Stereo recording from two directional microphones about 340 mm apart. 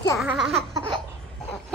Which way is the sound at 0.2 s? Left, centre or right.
Centre.